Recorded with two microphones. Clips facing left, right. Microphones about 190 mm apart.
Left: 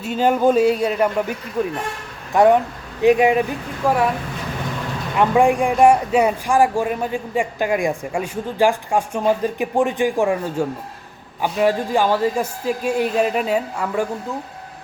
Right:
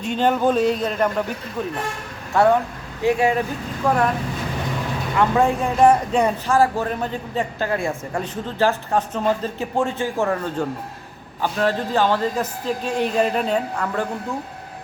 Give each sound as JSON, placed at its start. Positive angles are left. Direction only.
{"t": 0.0, "sound": "speech", "side_deg": 5}
{"t": 3.8, "sound": "speech", "side_deg": 5}
{"t": 5.1, "sound": "speech", "side_deg": 15}